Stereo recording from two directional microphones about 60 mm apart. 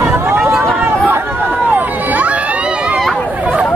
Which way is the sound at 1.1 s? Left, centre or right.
Right.